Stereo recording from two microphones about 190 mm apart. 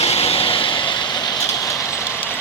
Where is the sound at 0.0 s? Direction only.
30° left (ahead or behind).